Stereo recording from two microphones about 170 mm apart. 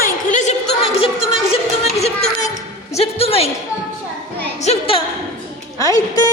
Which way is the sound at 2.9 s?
35° left (ahead or behind).